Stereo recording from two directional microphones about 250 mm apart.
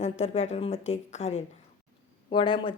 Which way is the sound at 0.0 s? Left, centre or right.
Left.